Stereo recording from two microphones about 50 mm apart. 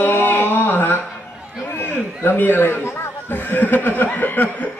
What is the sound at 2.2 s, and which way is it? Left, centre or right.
Speech, left.